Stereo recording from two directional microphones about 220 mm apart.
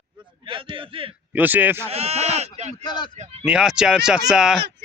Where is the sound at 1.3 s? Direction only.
10° right (ahead or behind).